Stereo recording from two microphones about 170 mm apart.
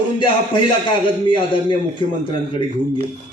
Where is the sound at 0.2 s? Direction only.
30° left (ahead or behind).